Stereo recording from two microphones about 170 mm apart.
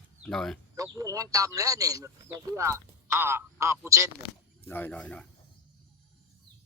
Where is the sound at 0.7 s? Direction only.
20° right (ahead or behind).